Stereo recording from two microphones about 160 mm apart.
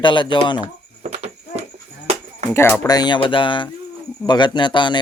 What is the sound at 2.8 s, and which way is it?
Speech, 25° left (ahead or behind).